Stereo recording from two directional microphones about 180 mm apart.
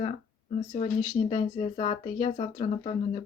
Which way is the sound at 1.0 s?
25° left (ahead or behind).